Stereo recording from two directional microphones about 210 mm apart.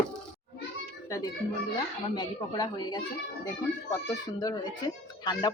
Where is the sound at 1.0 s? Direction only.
15° left (ahead or behind).